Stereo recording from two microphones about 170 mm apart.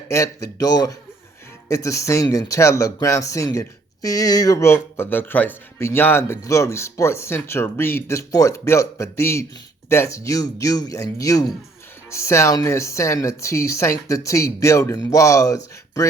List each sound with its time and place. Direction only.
0.1 s speech: 20° left (ahead or behind)